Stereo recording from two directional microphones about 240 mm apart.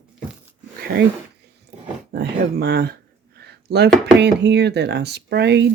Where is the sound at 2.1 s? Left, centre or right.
Right.